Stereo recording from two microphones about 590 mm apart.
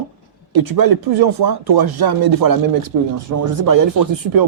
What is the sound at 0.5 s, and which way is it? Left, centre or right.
Speech, right.